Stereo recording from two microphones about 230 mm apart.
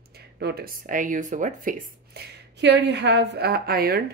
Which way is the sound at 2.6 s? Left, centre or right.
Right.